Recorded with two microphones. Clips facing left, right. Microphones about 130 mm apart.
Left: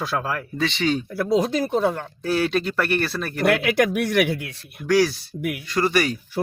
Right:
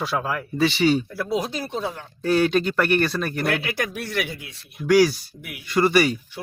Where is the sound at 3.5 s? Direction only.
85° left; by 4.9 s 60° left (ahead or behind).